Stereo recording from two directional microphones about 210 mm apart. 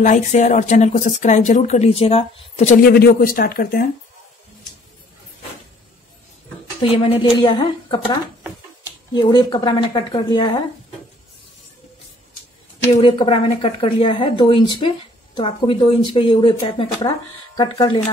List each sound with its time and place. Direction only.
0.0 s speech: 35° left (ahead or behind)
2.8 s speech: 45° left (ahead or behind)
6.8 s speech: 25° left (ahead or behind)
12.9 s speech: 25° left (ahead or behind)